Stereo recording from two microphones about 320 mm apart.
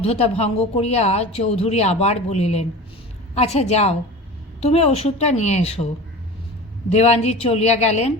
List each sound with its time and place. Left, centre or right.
0.0 s speech: centre
6.9 s speech: left